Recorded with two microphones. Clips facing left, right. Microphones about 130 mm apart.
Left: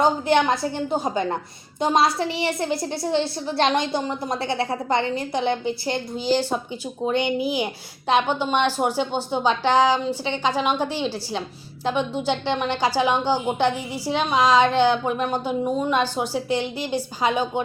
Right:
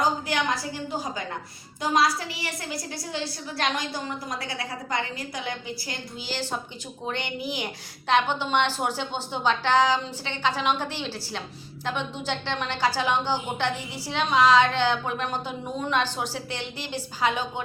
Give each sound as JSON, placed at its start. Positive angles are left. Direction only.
{"t": 0.0, "sound": "a woman's voice", "side_deg": 25}